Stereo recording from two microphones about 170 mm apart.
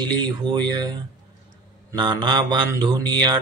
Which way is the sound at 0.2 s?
25° right (ahead or behind).